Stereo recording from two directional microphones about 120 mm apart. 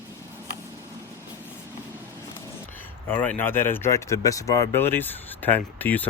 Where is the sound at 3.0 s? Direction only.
15° left (ahead or behind).